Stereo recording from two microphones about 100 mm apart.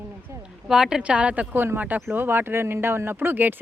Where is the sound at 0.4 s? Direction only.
5° right (ahead or behind).